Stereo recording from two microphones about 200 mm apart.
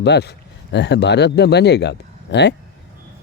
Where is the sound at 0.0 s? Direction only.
55° left (ahead or behind).